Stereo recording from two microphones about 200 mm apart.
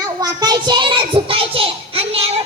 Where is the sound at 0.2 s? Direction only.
20° right (ahead or behind).